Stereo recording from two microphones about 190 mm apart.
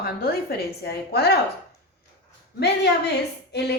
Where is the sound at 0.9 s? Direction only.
60° left (ahead or behind).